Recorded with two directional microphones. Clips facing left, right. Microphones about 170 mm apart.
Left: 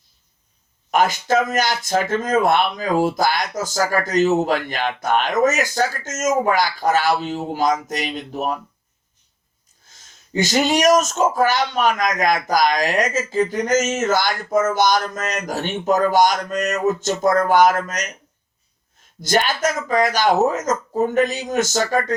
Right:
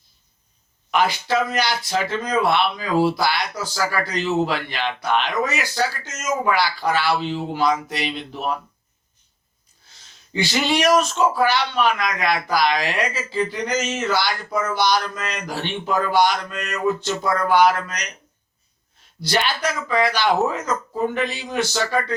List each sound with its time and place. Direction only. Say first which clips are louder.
0.9 s speech: left 2 dB; 45° left (ahead or behind)
9.8 s speech: left 1 dB; 45° left (ahead or behind)
19.2 s speech: left 3 dB; 45° left (ahead or behind)